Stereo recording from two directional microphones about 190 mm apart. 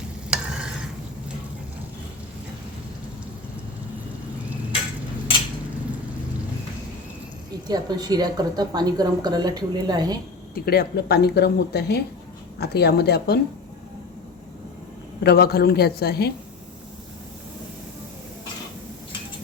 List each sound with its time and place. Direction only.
0.3 s stir: 5° right (ahead or behind)
7.7 s a woman's voice: 20° right (ahead or behind)
10.5 s speech: 55° left (ahead or behind)
15.2 s speech: 55° left (ahead or behind)